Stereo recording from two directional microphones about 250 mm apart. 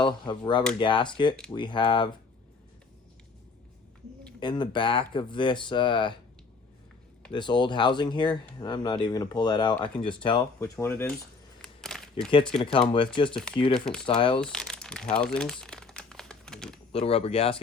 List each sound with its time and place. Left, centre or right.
0.0 s speech: centre
4.4 s speech: centre
7.3 s speech: centre
11.6 s a sound: centre
12.3 s speech: centre
13.7 s speech: centre
14.2 s speech: centre
14.4 s speech: centre
15.2 s typing: centre
16.9 s speech: left